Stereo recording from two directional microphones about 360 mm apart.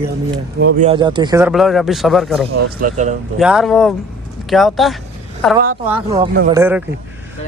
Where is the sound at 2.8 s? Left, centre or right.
Centre.